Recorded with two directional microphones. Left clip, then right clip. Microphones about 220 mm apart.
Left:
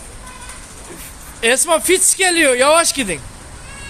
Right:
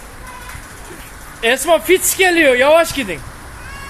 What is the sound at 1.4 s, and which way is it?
Speech, 20° left (ahead or behind).